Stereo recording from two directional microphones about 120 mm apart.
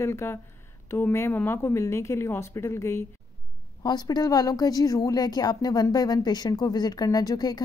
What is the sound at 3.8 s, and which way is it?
Speech, 35° left (ahead or behind).